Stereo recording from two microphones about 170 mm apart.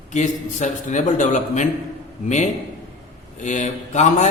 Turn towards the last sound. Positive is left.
turn(degrees=45)  # may be behind; listen again after turning